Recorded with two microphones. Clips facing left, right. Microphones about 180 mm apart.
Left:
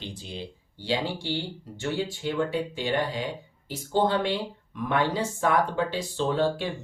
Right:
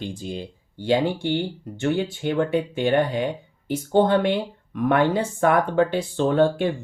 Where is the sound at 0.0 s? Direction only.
45° right (ahead or behind).